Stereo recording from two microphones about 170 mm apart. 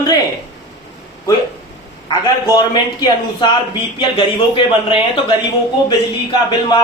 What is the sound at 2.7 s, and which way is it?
A man's voice, 25° left (ahead or behind).